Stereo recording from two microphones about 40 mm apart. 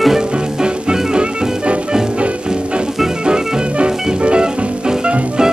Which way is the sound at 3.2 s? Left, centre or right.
Right.